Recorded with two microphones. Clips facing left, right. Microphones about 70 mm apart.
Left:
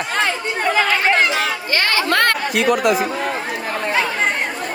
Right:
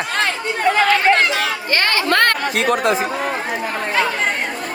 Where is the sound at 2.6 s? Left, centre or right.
Right.